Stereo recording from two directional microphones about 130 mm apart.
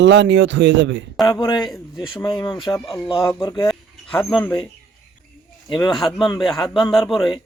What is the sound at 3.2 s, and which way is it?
Speech, 30° left (ahead or behind).